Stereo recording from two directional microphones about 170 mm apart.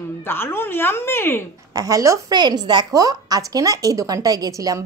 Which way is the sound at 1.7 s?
20° right (ahead or behind).